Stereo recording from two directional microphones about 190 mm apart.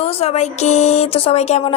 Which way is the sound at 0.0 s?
30° left (ahead or behind).